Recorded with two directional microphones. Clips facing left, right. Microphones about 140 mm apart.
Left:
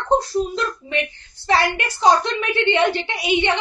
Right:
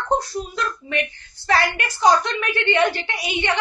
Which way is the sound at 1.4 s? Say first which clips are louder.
Left 1 dB; 25° left (ahead or behind).